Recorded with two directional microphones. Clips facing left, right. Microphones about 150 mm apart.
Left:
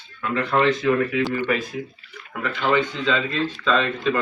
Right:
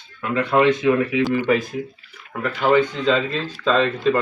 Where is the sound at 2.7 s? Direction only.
40° right (ahead or behind).